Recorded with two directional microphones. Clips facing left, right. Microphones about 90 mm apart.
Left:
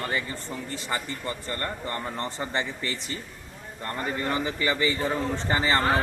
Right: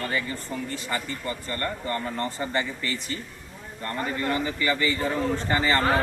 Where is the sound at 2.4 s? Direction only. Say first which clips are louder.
Right 2 dB; 25° left (ahead or behind).